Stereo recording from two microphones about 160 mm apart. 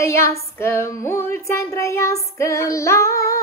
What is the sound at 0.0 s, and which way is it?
Female singing, 15° left (ahead or behind).